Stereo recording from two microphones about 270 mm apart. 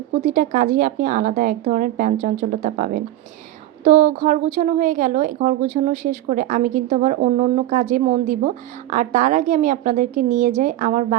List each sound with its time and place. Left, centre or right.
0.3 s a woman's voice: right